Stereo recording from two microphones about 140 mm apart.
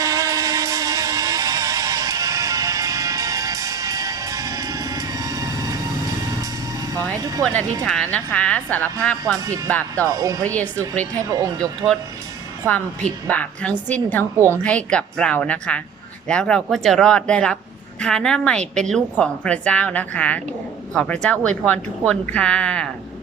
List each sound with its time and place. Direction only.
0.0 s music: 25° right (ahead or behind)
7.2 s speech: 25° right (ahead or behind)
7.9 s speech: 5° left (ahead or behind)
10.1 s speech: 25° right (ahead or behind)
10.4 s speech: 10° left (ahead or behind)
11.2 s speech: 25° right (ahead or behind)
11.6 s speech: 5° left (ahead or behind)
13.2 s speech: 10° left (ahead or behind)